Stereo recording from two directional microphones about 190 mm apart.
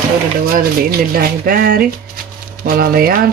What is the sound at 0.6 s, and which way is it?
Speech, 50° right (ahead or behind).